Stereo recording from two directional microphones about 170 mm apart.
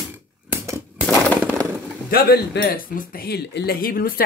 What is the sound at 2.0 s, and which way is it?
Speech, 60° left (ahead or behind).